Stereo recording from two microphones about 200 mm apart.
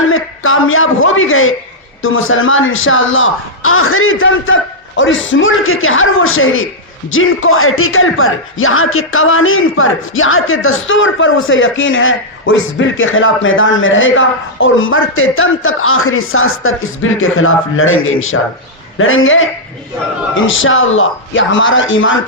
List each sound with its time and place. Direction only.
0.1 s a man's voice: 90° left; by 22.1 s 75° left (ahead or behind)